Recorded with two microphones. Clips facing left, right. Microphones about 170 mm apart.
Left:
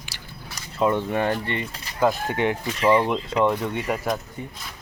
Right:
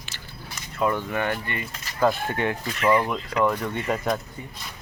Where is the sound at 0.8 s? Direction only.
25° left (ahead or behind).